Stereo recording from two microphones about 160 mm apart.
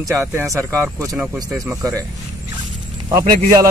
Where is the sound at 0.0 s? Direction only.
15° right (ahead or behind).